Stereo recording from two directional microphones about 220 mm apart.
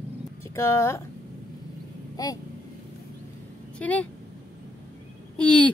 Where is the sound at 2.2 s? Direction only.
15° left (ahead or behind).